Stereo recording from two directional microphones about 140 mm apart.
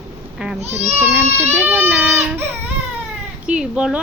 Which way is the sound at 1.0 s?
15° right (ahead or behind).